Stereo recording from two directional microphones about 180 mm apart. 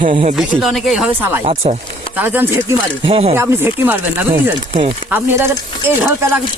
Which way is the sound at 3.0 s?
30° right (ahead or behind).